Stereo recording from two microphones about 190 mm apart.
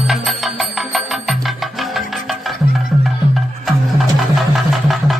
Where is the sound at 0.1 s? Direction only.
Centre (ahead or behind).